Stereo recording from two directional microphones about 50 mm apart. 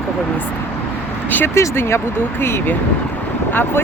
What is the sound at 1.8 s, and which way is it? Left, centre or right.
Speech, left.